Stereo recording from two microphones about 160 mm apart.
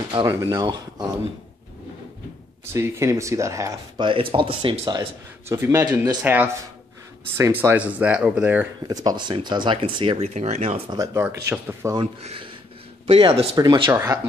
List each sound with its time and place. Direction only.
0.1 s speech: 25° right (ahead or behind)
2.6 s speech: 15° right (ahead or behind)
4.0 s speech: 35° right (ahead or behind)
5.5 s speech: 15° right (ahead or behind)
7.3 s speech: 15° right (ahead or behind)
8.8 s speech: 25° right (ahead or behind)
10.2 s speech: 45° right (ahead or behind)
10.9 s speech: 20° right (ahead or behind)
11.2 s speech: 10° right (ahead or behind)
12.2 s speech: 40° right (ahead or behind)
13.6 s speech: 25° right (ahead or behind)